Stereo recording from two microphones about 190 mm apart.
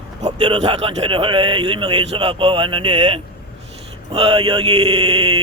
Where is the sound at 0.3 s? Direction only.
25° right (ahead or behind).